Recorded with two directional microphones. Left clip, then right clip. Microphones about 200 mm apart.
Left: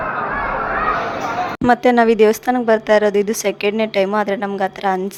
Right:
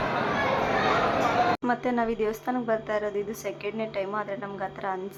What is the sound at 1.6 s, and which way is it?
Speech, 50° left (ahead or behind).